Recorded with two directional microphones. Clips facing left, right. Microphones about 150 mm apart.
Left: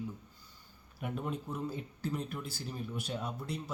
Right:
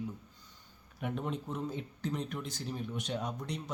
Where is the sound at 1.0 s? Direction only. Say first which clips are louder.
Right 1 dB; 5° left (ahead or behind).